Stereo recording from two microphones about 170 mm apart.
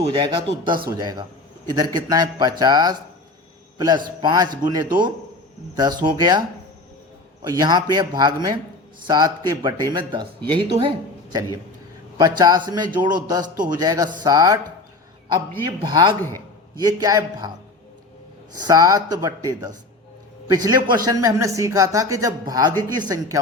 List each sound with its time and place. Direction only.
0.0 s speech: 30° right (ahead or behind)
7.4 s speech: 25° right (ahead or behind)
15.6 s speech: 25° right (ahead or behind)
18.6 s speech: 20° right (ahead or behind)